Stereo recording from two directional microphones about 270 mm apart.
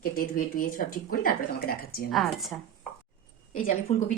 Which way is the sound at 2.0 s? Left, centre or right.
Centre.